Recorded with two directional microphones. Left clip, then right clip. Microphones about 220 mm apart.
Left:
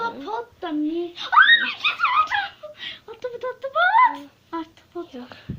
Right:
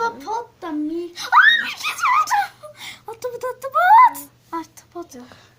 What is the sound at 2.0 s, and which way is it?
Squeak, 35° right (ahead or behind).